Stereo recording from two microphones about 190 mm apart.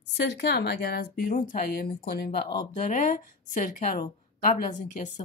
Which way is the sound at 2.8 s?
40° left (ahead or behind).